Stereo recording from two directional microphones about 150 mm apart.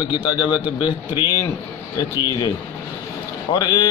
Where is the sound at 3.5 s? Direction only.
25° left (ahead or behind).